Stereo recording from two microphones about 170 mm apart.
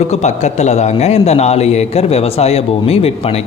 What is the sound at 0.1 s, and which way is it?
A man's voice, 40° left (ahead or behind).